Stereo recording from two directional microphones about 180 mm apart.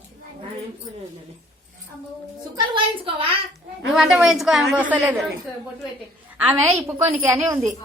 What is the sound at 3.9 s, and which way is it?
A woman's voice, centre (ahead or behind).